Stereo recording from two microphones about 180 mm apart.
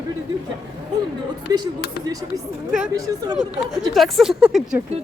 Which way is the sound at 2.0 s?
65° left (ahead or behind).